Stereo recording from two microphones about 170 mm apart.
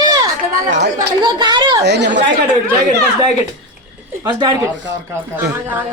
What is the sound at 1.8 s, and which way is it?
Speech, 90° right.